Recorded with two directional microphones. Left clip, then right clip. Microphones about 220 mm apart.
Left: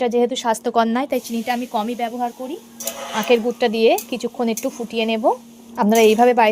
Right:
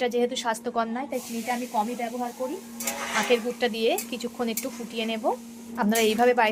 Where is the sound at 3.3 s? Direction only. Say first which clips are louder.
Left 11 dB; 30° left (ahead or behind).